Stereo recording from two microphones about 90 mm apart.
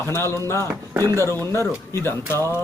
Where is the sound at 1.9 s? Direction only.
30° left (ahead or behind).